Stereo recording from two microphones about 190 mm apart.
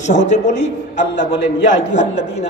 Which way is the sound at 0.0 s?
40° left (ahead or behind).